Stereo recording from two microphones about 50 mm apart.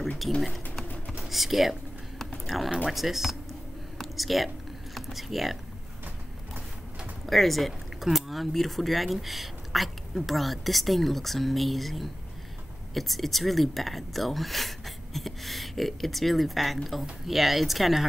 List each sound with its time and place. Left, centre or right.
0.2 s speech: centre
1.1 s computer keyboard: centre
2.4 s speech: centre
4.0 s a sound: centre
4.9 s speech: centre
7.2 s speech: centre